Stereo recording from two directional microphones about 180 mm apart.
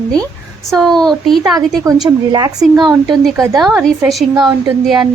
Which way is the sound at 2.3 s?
20° right (ahead or behind).